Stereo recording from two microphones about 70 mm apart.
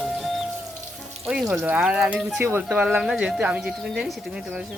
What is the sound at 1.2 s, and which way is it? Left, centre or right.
Speech, centre.